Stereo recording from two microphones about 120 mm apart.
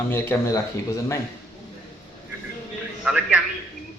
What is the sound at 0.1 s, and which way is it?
Speech, 20° left (ahead or behind).